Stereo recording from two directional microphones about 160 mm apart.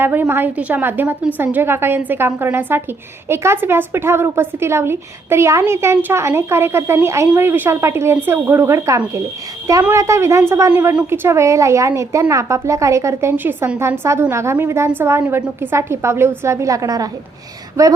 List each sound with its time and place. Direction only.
0.0 s a woman's voice: 10° right (ahead or behind)